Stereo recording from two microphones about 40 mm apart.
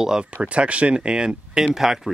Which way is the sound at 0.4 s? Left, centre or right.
Right.